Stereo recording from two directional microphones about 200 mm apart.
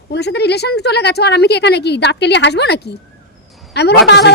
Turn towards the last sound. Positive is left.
turn(degrees=55)  # may be behind; listen again after turning